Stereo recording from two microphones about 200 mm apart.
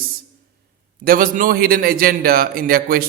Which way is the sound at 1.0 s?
45° right (ahead or behind).